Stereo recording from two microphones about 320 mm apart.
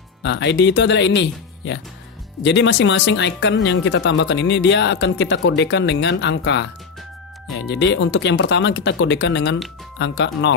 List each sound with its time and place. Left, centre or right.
0.2 s speech: left